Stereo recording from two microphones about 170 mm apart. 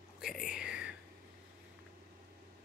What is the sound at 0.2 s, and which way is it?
Whispering, 5° right (ahead or behind).